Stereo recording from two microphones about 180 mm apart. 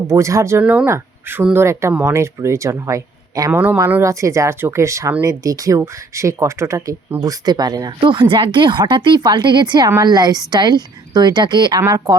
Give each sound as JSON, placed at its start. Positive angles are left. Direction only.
{"t": 0.1, "sound": "a woman's voice", "side_deg": -15}